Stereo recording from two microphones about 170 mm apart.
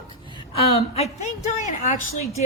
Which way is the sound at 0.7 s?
40° left (ahead or behind).